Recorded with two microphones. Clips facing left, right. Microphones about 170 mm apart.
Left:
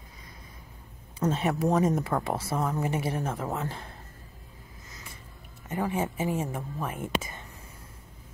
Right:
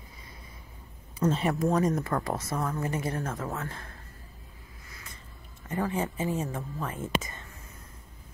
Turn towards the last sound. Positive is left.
turn(degrees=10)  # may be behind; listen again after turning